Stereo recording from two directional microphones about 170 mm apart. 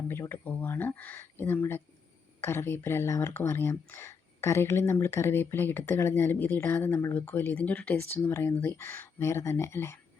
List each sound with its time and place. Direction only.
0.1 s speech: 15° left (ahead or behind)